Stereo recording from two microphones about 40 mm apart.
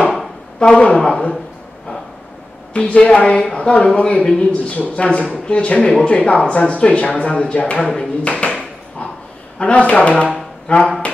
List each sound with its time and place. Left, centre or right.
0.6 s speech: left
2.7 s speech: left
7.8 s speech: centre
8.2 s a sound: left
9.6 s speech: left